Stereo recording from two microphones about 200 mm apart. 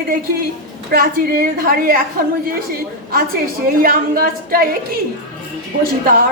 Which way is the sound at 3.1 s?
45° right (ahead or behind).